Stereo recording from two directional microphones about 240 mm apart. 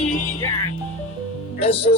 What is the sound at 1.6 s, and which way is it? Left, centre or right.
Speech, left.